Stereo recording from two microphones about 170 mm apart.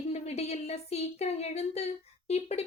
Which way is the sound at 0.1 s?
40° left (ahead or behind).